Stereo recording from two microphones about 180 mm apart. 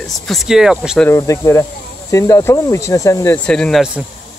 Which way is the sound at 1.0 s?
15° left (ahead or behind).